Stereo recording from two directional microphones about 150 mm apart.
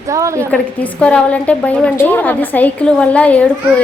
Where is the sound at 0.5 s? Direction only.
10° left (ahead or behind).